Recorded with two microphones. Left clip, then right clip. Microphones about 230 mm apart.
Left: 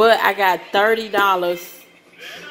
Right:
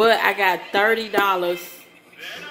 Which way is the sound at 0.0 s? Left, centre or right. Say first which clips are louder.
Left 3 dB; centre.